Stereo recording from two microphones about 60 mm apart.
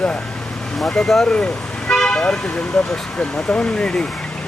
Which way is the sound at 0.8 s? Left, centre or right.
Centre.